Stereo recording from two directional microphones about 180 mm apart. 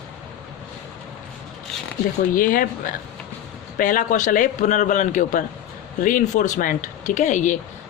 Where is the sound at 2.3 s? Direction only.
50° left (ahead or behind).